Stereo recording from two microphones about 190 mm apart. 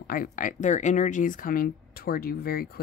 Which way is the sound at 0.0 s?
50° left (ahead or behind).